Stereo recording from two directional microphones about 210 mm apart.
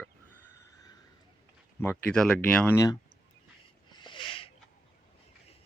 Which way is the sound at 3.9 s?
20° left (ahead or behind).